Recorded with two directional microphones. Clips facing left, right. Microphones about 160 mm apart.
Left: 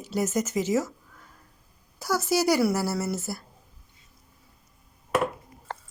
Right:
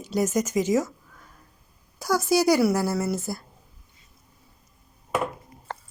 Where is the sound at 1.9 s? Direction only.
15° right (ahead or behind).